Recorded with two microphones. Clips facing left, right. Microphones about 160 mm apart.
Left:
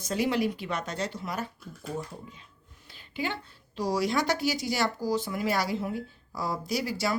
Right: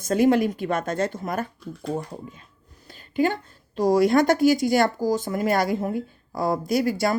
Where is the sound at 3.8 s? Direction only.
50° right (ahead or behind).